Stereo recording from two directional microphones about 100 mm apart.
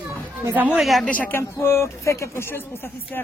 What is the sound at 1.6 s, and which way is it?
Speech, 25° left (ahead or behind).